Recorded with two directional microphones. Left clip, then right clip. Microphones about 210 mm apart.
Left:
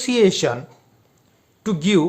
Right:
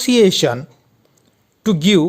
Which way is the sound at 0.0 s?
35° right (ahead or behind).